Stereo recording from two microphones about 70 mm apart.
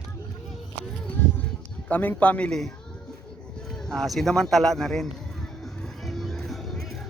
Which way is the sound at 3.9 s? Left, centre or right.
Centre.